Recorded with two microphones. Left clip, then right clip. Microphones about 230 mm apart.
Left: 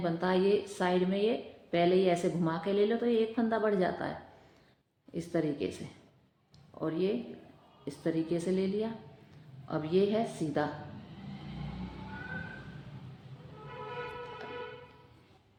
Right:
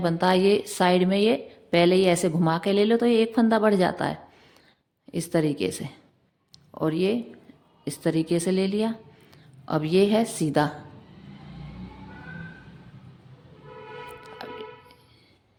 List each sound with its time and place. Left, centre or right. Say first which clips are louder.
0.0 s a woman's voice: right 8 dB; right
5.1 s a woman's voice: right 8 dB; right
14.4 s music: right 5 dB; right